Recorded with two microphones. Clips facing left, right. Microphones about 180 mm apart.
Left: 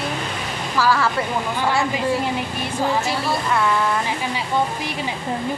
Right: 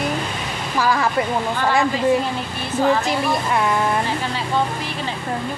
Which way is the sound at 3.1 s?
15° right (ahead or behind).